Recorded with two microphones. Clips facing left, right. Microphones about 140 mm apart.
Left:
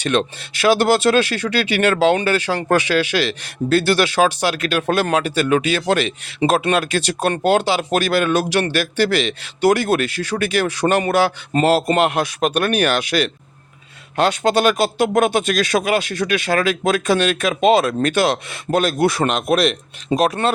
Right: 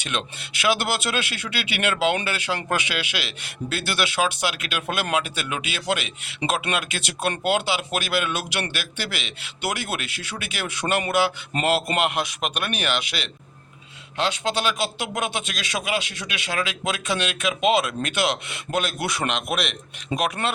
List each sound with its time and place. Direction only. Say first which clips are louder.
0.7 s speech: left 10 dB; 40° left (ahead or behind)